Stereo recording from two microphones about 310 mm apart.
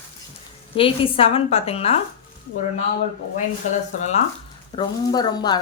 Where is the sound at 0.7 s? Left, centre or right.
Centre.